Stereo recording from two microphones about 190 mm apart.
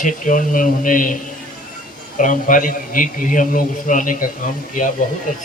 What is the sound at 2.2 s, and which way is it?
A man's voice, 45° left (ahead or behind).